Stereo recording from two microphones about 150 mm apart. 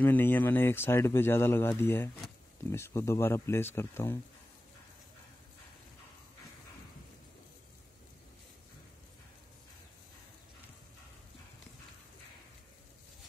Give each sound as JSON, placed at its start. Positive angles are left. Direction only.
{"t": 0.0, "sound": "speech", "side_deg": 10}